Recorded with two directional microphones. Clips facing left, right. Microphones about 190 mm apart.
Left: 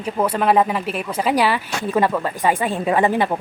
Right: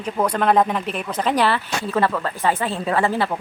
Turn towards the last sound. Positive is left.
turn(degrees=15)  # may be behind; listen again after turning